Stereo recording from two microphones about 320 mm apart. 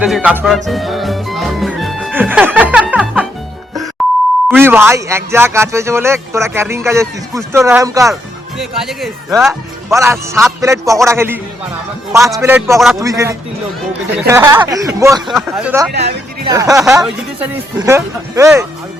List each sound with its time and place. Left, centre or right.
0.0 s music: centre
4.4 s speech: centre
15.9 s speech: right
16.5 s speech: centre